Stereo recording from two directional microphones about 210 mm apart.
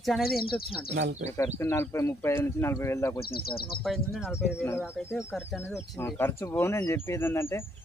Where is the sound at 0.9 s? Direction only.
60° right (ahead or behind).